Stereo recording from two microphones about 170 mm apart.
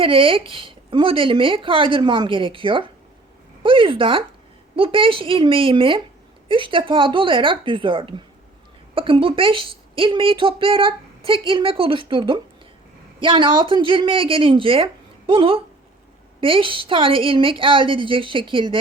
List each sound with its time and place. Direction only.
0.0 s a woman's voice: 30° right (ahead or behind)